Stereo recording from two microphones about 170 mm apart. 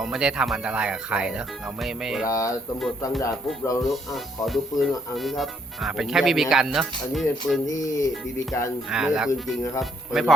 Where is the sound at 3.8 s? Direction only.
Centre (ahead or behind).